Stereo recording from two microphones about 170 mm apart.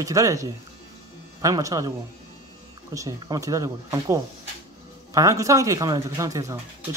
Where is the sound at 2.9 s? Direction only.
20° right (ahead or behind).